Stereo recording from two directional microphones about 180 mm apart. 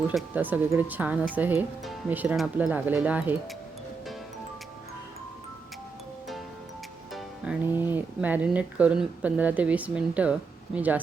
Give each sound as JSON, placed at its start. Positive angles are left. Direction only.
{"t": 0.1, "sound": "speech", "side_deg": -5}
{"t": 7.1, "sound": "music", "side_deg": 0}
{"t": 7.7, "sound": "speech", "side_deg": -10}